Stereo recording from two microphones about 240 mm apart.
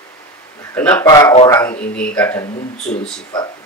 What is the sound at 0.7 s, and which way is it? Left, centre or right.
Speech, centre.